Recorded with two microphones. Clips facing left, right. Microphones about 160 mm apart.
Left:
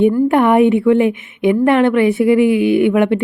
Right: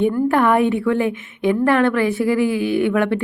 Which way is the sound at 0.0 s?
20° left (ahead or behind).